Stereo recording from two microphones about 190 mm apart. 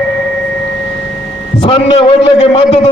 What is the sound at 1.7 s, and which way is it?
Speech, 30° left (ahead or behind).